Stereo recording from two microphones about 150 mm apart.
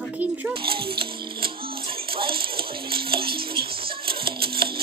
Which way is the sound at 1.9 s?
35° right (ahead or behind).